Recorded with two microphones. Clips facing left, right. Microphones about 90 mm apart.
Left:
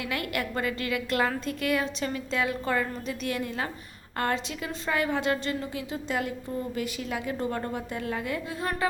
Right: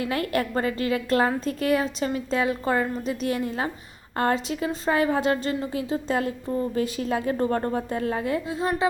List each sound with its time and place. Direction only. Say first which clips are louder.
0.0 s a woman's voice: right 6 dB; 30° right (ahead or behind)